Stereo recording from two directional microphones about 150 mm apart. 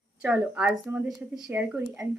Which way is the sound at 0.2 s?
10° right (ahead or behind).